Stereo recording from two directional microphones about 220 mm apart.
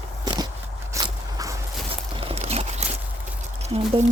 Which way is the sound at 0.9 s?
15° right (ahead or behind).